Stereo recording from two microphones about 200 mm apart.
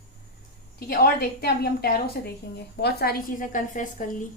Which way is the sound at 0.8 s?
50° left (ahead or behind).